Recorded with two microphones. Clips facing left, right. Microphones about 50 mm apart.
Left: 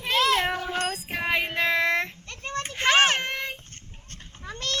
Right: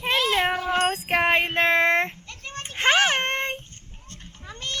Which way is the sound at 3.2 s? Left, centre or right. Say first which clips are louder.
Right 5 dB; right.